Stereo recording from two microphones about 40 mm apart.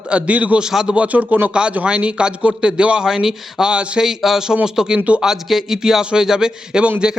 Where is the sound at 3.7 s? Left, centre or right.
Right.